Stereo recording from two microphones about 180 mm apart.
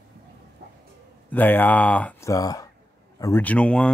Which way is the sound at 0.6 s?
60° right (ahead or behind).